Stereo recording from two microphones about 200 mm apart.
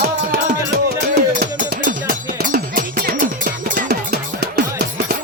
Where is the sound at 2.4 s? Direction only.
45° right (ahead or behind).